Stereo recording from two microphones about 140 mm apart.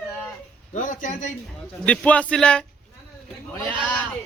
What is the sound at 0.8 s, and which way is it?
Speech, 70° left (ahead or behind).